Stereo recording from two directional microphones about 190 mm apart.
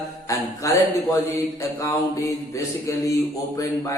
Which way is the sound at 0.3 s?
15° left (ahead or behind).